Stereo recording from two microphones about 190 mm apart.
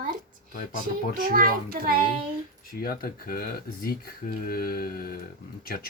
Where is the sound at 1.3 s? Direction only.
50° right (ahead or behind).